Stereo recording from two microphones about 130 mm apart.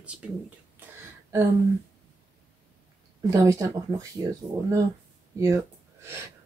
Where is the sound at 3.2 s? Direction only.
25° right (ahead or behind).